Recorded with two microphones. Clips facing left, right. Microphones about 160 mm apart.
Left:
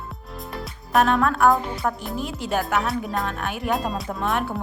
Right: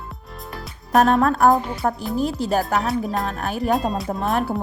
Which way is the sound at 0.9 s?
40° right (ahead or behind).